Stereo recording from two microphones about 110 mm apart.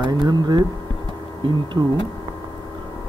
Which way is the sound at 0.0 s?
40° right (ahead or behind).